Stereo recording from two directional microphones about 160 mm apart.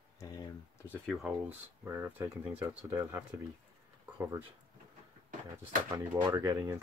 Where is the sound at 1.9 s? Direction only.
15° right (ahead or behind).